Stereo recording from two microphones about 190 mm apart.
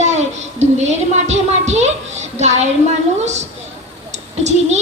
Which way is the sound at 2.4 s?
35° right (ahead or behind).